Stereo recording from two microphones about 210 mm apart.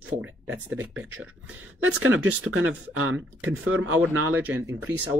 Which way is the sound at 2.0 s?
75° right (ahead or behind).